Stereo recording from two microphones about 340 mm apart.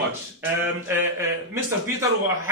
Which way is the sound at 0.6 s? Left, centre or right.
Centre.